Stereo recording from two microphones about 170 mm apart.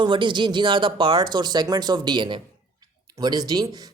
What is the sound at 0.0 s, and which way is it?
Speech, 30° right (ahead or behind).